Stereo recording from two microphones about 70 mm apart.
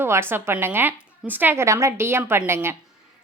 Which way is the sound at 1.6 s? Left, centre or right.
Right.